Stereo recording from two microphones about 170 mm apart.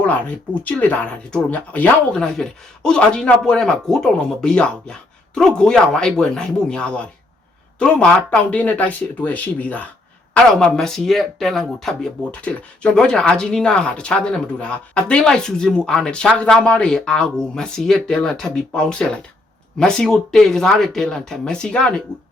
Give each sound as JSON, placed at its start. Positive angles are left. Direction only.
{"t": 0.6, "sound": "speech", "side_deg": 10}